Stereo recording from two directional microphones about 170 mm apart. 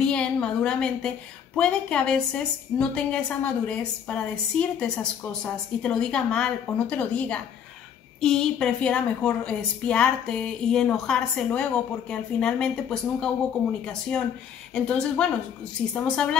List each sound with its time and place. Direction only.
0.0 s a sound: 5° left (ahead or behind)
1.6 s a woman's voice: 5° left (ahead or behind)
14.7 s a woman's voice: 5° left (ahead or behind)